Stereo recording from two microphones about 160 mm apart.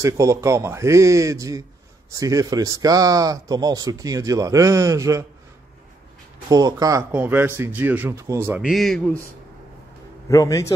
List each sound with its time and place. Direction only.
0.0 s speech: 20° right (ahead or behind)
6.5 s speech: 25° right (ahead or behind)
8.5 s a man's voice: centre (ahead or behind)
10.3 s a man's voice: 20° left (ahead or behind)